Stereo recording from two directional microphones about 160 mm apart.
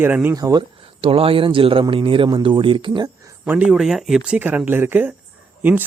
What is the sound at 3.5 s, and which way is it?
Speech, 10° right (ahead or behind).